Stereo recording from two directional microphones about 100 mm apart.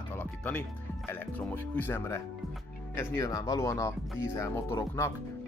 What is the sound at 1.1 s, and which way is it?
Speech, 20° left (ahead or behind).